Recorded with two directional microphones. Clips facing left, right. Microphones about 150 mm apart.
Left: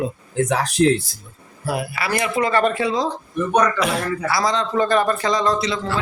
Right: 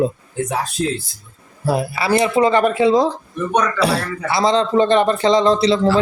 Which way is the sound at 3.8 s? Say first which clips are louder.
Right 3 dB; 35° right (ahead or behind).